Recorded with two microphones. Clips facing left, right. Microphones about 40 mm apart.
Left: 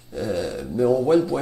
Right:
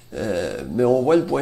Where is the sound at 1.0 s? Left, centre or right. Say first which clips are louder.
Right 1 dB; right.